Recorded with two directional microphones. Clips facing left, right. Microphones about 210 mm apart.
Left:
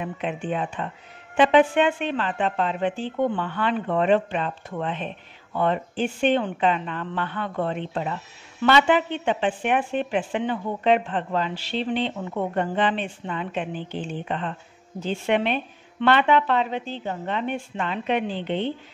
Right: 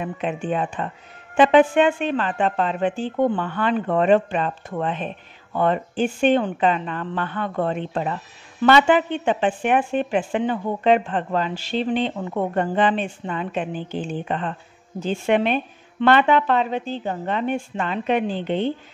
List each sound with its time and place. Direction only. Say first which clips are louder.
0.0 s a woman's voice: right 3 dB; 45° right (ahead or behind)